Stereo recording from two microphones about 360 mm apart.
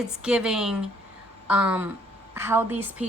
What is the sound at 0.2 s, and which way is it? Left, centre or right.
A woman's voice, centre.